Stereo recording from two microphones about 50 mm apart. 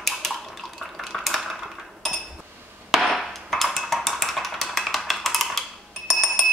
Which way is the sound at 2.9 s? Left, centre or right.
Centre.